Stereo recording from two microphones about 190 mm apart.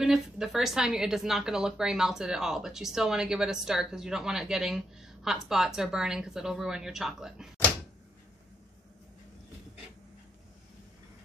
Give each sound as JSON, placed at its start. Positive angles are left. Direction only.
{"t": 0.0, "sound": "speech", "side_deg": 0}